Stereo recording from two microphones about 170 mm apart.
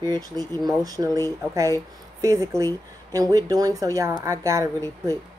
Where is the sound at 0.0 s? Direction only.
20° right (ahead or behind).